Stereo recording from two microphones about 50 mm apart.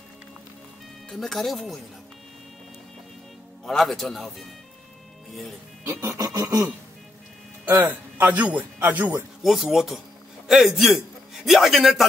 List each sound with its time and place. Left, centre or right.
1.2 s a man's voice: centre
3.6 s a man's voice: centre
5.9 s a sound: right
7.8 s a man's voice: right
8.3 s a man's voice: right
9.4 s a man's voice: centre